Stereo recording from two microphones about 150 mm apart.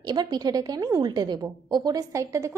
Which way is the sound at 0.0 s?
30° right (ahead or behind).